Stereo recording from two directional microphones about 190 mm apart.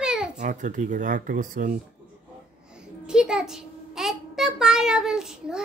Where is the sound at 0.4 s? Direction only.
40° right (ahead or behind).